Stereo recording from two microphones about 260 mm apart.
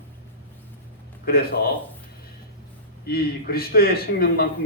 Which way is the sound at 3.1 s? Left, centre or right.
Left.